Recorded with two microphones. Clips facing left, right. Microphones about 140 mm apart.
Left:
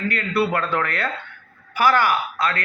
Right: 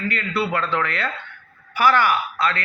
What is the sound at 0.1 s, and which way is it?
A man's voice, 50° left (ahead or behind).